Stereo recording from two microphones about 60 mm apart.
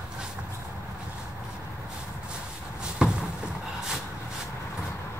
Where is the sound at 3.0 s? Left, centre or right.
Centre.